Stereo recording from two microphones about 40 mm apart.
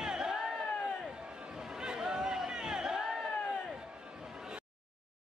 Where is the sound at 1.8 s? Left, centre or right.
Centre.